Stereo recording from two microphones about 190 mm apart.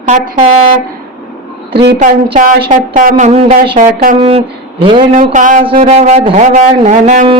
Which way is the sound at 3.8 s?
45° right (ahead or behind).